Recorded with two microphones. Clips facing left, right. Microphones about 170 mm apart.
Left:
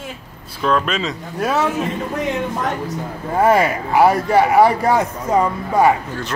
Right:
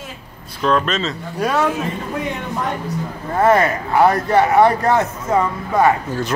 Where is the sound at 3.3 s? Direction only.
10° left (ahead or behind).